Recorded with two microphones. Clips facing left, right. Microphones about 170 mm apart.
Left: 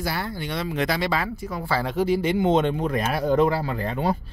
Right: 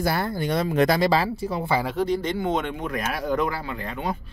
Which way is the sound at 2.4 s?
30° left (ahead or behind).